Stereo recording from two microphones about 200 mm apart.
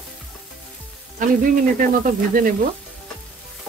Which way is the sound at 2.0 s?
45° right (ahead or behind).